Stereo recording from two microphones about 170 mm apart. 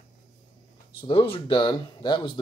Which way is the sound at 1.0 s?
30° left (ahead or behind).